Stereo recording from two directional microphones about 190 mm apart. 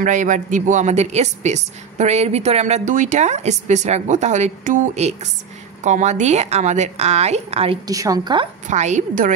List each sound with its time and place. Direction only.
0.0 s a woman's voice: 40° right (ahead or behind); by 8.5 s 25° right (ahead or behind)
8.6 s a woman's voice: 40° right (ahead or behind)